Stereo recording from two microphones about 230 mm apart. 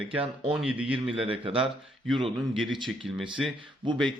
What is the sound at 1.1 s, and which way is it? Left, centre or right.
Speech, right.